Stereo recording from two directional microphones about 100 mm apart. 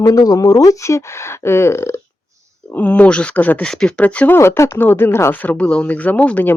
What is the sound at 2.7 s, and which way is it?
Speech, 15° left (ahead or behind).